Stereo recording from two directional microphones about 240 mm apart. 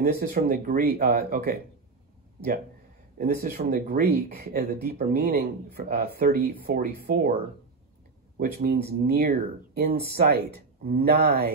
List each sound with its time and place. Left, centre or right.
0.0 s speech: right
3.2 s speech: right
8.4 s speech: right